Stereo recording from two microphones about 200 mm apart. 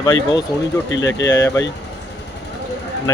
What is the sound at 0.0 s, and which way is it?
Speech, 20° left (ahead or behind).